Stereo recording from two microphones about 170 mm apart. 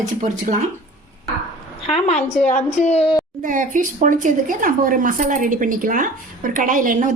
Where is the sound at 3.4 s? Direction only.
50° right (ahead or behind).